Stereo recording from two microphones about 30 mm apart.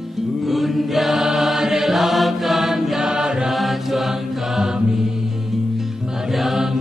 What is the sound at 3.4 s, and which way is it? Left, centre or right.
Mantra, centre.